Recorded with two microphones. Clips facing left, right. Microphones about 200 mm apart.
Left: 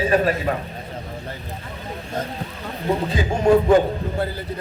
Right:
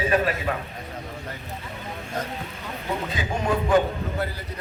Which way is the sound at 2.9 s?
35° left (ahead or behind).